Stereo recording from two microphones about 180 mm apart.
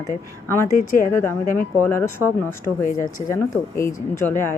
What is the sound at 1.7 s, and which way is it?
Speech, 15° left (ahead or behind).